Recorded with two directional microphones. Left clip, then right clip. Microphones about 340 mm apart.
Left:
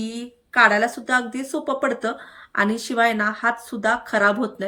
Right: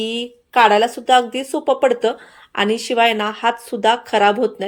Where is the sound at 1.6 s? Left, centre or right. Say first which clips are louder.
Right 8 dB; right.